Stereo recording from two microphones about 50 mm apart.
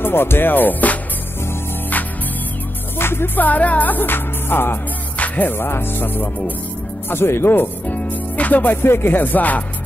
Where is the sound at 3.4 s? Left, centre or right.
Left.